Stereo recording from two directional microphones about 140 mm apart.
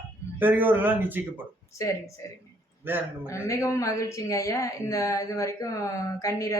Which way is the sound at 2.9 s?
15° right (ahead or behind).